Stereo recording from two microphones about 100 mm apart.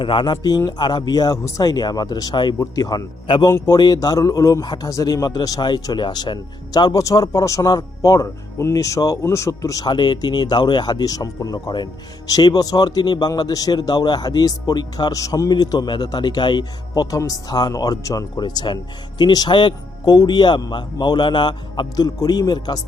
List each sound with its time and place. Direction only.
0.0 s speech: 55° left (ahead or behind)
2.6 s a man's voice: 40° left (ahead or behind)
9.8 s speech: 50° left (ahead or behind)